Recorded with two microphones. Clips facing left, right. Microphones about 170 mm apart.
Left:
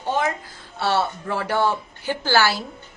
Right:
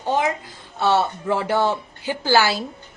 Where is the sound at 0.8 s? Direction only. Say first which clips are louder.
Right 3 dB; 20° right (ahead or behind).